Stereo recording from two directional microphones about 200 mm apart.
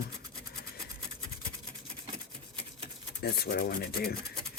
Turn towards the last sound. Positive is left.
turn(degrees=50)  # may be behind; listen again after turning